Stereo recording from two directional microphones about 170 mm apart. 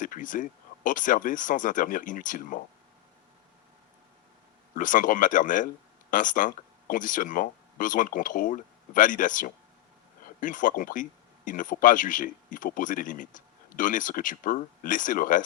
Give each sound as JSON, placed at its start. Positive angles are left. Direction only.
{"t": 0.0, "sound": "speech", "side_deg": 50}
{"t": 4.7, "sound": "speech", "side_deg": 50}